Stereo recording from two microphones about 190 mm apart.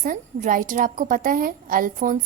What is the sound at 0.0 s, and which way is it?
A woman's voice, 45° right (ahead or behind).